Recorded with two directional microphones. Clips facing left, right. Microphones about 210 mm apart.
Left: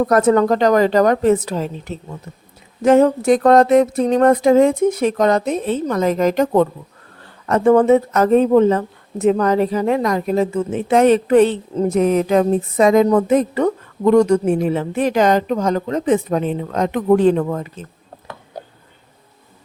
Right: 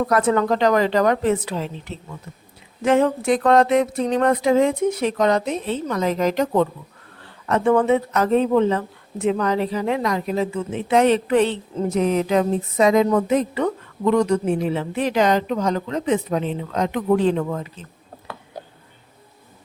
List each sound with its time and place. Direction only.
0.0 s speech: 45° left (ahead or behind)